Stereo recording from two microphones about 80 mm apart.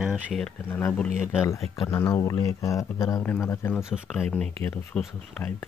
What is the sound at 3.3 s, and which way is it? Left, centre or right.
Speech, left.